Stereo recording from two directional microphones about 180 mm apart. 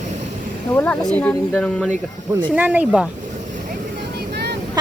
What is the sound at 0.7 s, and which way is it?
Speech, 10° left (ahead or behind).